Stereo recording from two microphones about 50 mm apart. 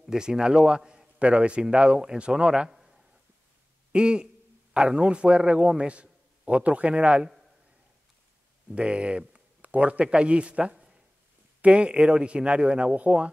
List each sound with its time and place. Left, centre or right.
0.0 s a man's voice: centre
2.7 s a sound: centre
3.9 s a man's voice: centre
8.6 s a man's voice: right